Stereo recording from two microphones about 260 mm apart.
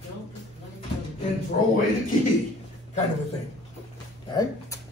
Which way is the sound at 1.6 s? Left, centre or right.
Left.